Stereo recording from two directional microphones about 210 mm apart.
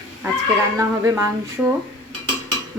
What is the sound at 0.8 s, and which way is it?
Speech, 10° right (ahead or behind).